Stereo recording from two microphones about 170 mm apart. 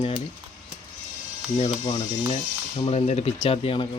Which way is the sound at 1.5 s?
35° left (ahead or behind).